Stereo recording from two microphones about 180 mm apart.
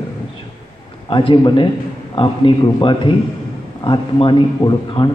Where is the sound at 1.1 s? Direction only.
25° left (ahead or behind).